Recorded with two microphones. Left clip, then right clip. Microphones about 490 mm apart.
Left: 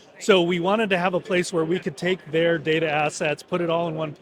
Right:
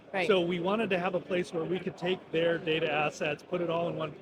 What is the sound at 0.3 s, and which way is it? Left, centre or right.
Speech, left.